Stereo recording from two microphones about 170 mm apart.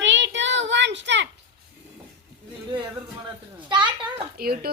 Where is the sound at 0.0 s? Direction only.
90° right.